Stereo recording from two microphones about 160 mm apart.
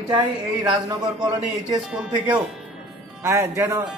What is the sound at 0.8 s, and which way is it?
Speech, 25° right (ahead or behind).